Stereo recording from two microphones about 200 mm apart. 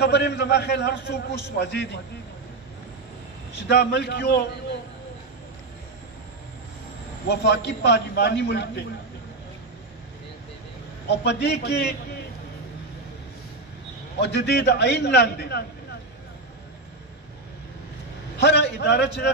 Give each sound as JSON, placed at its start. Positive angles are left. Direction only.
{"t": 0.0, "sound": "a man's voice", "side_deg": 55}
{"t": 3.6, "sound": "a man's voice", "side_deg": 55}
{"t": 7.2, "sound": "a man's voice", "side_deg": 55}
{"t": 11.1, "sound": "a man's voice", "side_deg": 60}
{"t": 14.2, "sound": "a man's voice", "side_deg": 55}
{"t": 18.4, "sound": "a man's voice", "side_deg": 55}